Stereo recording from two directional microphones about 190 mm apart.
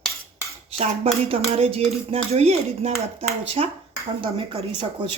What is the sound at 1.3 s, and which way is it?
Speech, 30° right (ahead or behind).